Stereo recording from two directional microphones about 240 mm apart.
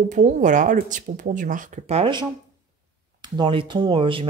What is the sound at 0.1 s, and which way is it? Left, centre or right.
Speech, right.